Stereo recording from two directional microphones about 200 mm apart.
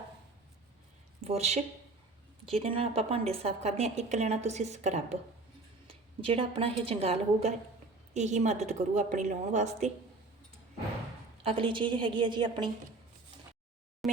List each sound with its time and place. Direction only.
1.2 s a woman's voice: 30° right (ahead or behind)
11.4 s a woman's voice: 25° right (ahead or behind)
14.0 s a sound: centre (ahead or behind)